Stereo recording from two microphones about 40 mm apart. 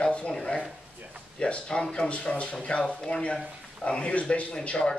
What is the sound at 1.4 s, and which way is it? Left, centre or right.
A man's voice, left.